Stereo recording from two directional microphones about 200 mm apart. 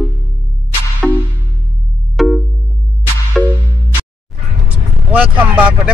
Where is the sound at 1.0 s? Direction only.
Centre (ahead or behind).